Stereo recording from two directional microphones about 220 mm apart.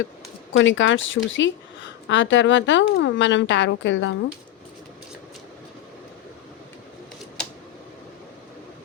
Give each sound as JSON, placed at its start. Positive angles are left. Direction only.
{"t": 0.5, "sound": "a woman's voice", "side_deg": 60}